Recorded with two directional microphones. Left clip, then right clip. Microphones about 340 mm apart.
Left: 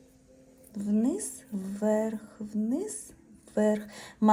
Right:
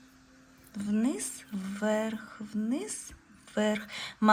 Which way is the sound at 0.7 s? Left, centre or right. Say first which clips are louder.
Left 2 dB; centre.